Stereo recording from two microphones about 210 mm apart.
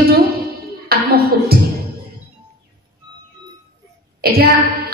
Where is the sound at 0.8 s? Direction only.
45° right (ahead or behind).